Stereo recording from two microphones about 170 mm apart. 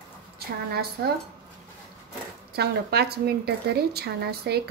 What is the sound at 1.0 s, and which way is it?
Speech, 70° right (ahead or behind).